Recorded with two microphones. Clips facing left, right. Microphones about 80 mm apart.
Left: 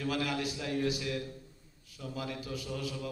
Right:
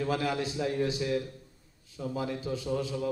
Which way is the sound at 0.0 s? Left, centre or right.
Right.